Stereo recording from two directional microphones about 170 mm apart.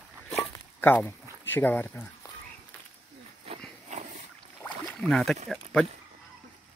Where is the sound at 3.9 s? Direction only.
45° right (ahead or behind).